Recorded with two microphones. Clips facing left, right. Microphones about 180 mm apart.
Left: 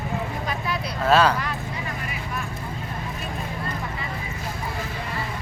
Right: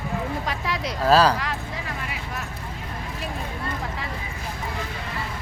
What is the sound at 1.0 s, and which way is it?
Speech, 35° right (ahead or behind).